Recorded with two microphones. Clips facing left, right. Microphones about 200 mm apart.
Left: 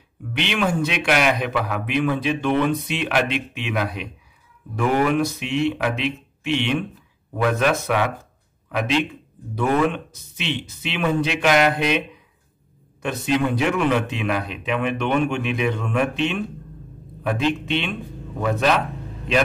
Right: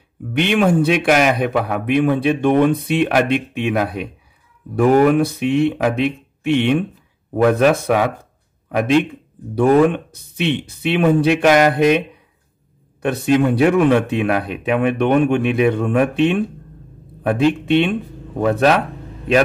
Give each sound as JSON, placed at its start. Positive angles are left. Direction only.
{"t": 0.3, "sound": "speech", "side_deg": -50}
{"t": 9.6, "sound": "speech", "side_deg": -35}
{"t": 9.8, "sound": "speech", "side_deg": -55}
{"t": 13.3, "sound": "speech", "side_deg": -50}
{"t": 17.4, "sound": "speech", "side_deg": -50}